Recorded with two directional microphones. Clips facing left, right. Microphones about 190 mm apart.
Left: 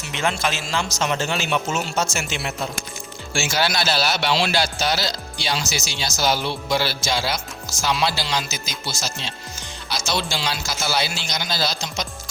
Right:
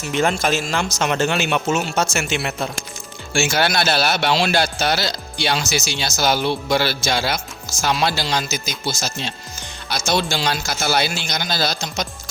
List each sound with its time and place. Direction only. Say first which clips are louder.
0.0 s a man's voice: right 5 dB; 45° right (ahead or behind)